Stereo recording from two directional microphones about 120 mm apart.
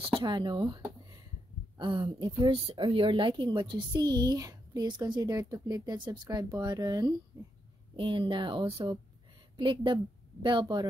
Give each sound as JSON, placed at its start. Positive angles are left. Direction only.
{"t": 0.0, "sound": "a woman's voice", "side_deg": -45}